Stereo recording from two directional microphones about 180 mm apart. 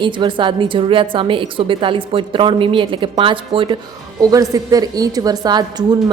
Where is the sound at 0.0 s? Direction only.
25° right (ahead or behind).